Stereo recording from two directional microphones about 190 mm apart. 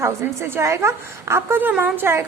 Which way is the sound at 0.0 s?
15° right (ahead or behind).